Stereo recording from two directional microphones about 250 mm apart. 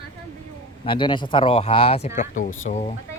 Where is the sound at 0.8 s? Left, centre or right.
Centre.